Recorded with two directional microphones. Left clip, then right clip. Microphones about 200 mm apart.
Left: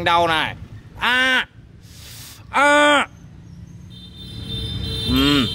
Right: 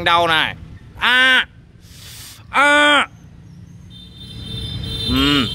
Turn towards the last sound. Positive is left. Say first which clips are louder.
# right 1 dB
turn(degrees=10)  # may be behind; listen again after turning